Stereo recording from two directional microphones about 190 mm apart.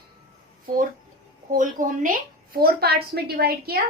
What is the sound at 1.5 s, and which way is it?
A woman's voice, 45° right (ahead or behind).